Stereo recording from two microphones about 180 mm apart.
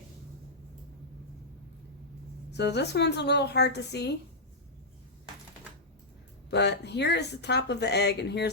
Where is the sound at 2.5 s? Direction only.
70° left (ahead or behind).